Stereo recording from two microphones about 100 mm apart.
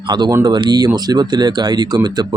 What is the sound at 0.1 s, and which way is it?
Speech, 50° right (ahead or behind).